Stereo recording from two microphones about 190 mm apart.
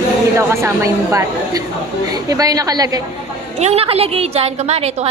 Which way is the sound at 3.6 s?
35° right (ahead or behind).